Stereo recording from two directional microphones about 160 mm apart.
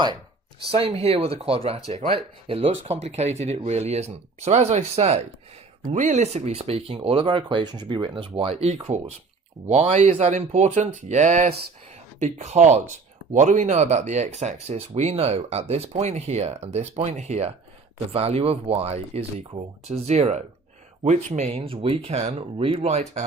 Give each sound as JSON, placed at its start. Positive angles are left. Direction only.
{"t": 0.7, "sound": "speech", "side_deg": -35}